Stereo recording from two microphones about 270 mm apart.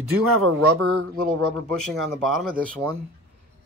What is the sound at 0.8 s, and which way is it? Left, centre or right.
Speech, right.